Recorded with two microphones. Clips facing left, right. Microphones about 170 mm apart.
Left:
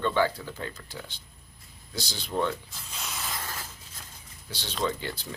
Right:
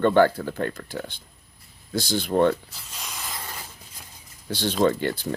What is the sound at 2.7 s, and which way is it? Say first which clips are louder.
Spray: even; centre (ahead or behind).